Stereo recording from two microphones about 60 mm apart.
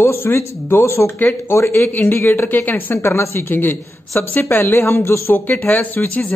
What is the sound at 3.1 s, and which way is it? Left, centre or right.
Speech, left.